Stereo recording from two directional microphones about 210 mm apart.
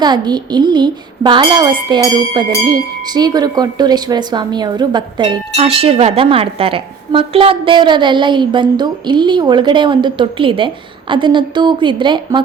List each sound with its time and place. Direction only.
0.0 s speech: 20° right (ahead or behind)